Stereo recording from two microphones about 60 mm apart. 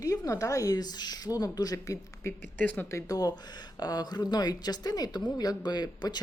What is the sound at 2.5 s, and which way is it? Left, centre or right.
Speech, left.